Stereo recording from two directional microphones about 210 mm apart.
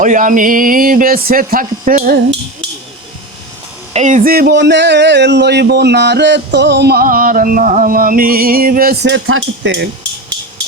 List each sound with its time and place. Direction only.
0.0 s speech: 35° right (ahead or behind)
3.9 s speech: 35° right (ahead or behind)
9.1 s stir: 70° right (ahead or behind)